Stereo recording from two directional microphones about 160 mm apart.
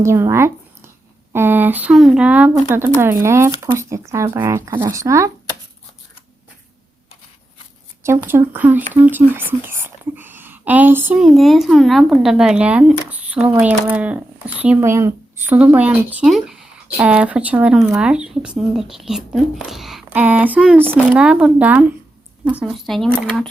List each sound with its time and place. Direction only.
0.0 s speech: 15° right (ahead or behind)
8.0 s speech: 15° right (ahead or behind); by 23.0 s centre (ahead or behind)